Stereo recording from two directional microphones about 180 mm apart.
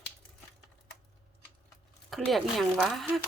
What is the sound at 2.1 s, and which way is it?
Speech, centre (ahead or behind).